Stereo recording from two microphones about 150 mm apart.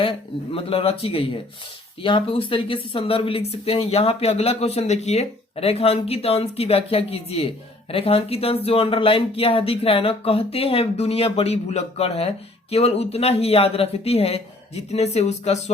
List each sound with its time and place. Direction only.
0.0 s speech: 40° left (ahead or behind)